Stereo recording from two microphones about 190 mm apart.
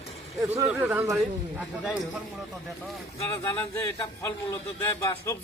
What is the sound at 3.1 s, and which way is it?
A man's voice, 15° left (ahead or behind).